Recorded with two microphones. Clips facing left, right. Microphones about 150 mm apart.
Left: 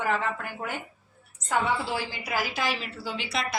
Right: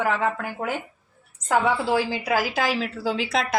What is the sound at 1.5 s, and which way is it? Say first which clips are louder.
A woman's voice: right 6 dB; 90° right.